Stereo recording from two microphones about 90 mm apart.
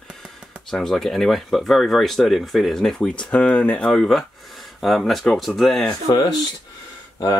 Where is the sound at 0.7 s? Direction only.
5° left (ahead or behind).